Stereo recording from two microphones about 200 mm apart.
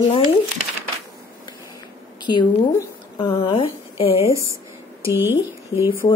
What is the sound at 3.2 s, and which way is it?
Speech, 25° left (ahead or behind).